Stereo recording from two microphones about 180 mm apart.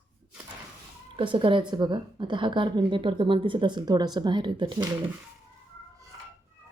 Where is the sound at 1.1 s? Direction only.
30° right (ahead or behind).